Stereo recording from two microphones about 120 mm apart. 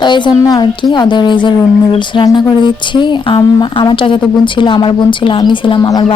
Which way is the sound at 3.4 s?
30° left (ahead or behind).